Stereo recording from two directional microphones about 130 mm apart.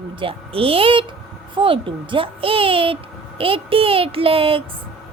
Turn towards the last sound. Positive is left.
turn(degrees=-45)  # may be behind; listen again after turning